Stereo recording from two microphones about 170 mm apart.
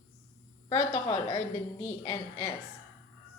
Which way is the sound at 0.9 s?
30° left (ahead or behind).